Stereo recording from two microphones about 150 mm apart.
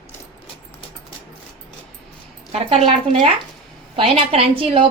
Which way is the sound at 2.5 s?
45° right (ahead or behind).